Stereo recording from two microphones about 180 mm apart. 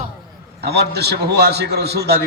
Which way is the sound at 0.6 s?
65° right (ahead or behind).